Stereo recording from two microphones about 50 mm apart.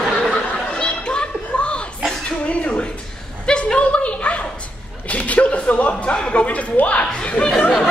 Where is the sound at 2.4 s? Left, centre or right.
Left.